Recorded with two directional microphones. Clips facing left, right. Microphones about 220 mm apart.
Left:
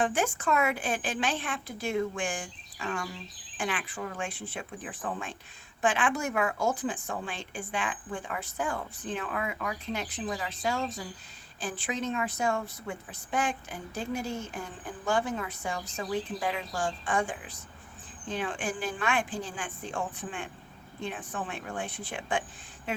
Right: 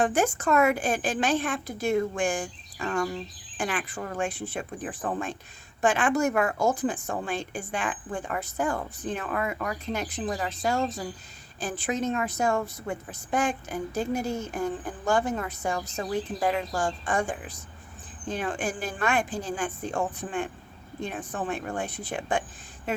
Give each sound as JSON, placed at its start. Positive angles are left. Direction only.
{"t": 0.0, "sound": "a woman's voice", "side_deg": -40}